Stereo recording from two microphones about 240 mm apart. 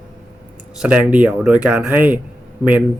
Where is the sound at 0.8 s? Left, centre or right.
Centre.